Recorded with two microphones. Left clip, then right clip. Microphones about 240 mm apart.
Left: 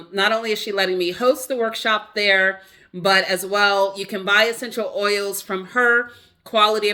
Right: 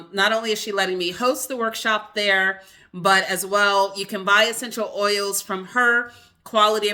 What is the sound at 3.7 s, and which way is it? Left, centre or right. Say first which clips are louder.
Speech: left 1 dB; centre.